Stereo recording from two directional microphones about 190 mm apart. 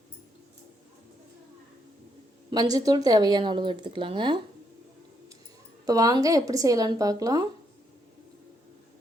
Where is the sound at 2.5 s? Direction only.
20° right (ahead or behind).